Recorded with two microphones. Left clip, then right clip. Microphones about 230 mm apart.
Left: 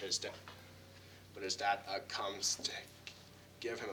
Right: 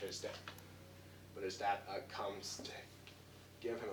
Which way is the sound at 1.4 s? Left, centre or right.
Left.